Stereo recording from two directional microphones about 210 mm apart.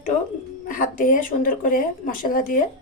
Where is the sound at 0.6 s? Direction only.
40° left (ahead or behind).